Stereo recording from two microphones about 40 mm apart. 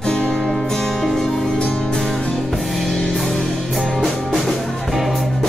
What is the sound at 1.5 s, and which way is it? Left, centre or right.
Music, left.